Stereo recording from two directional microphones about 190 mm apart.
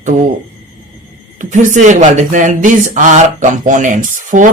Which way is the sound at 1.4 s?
40° right (ahead or behind).